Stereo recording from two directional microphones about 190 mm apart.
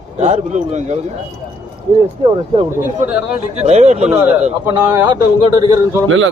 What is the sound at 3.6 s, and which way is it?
Speech, 35° right (ahead or behind).